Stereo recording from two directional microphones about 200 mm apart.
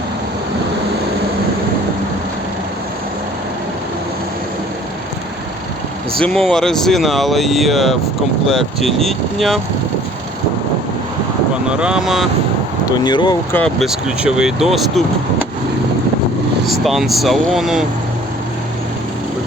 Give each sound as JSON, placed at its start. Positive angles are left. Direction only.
{"t": 6.1, "sound": "speech", "side_deg": 0}
{"t": 11.7, "sound": "speech", "side_deg": -5}
{"t": 13.1, "sound": "speech", "side_deg": 20}
{"t": 13.5, "sound": "speech", "side_deg": 5}
{"t": 16.6, "sound": "speech", "side_deg": 0}